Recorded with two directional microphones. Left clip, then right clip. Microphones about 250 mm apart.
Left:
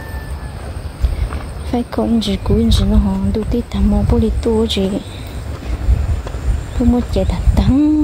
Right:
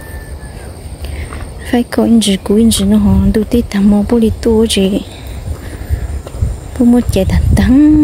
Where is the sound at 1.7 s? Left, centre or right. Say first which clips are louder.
Right 6 dB; right.